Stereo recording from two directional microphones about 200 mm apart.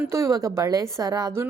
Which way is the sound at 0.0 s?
15° right (ahead or behind).